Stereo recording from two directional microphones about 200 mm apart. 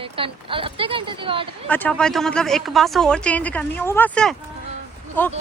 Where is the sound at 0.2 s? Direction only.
25° right (ahead or behind).